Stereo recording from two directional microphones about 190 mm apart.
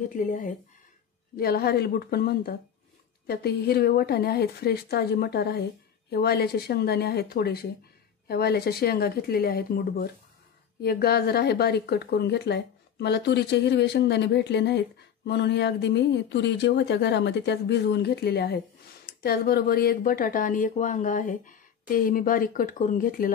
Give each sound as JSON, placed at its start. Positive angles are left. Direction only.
{"t": 0.1, "sound": "speech", "side_deg": 45}
{"t": 1.3, "sound": "speech", "side_deg": 55}